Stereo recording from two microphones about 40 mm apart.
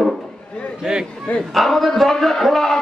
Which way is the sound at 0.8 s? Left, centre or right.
Centre.